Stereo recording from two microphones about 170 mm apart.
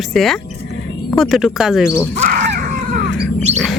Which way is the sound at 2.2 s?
50° right (ahead or behind).